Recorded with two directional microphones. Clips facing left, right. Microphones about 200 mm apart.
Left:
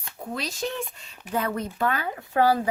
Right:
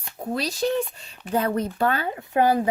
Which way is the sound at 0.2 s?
35° right (ahead or behind).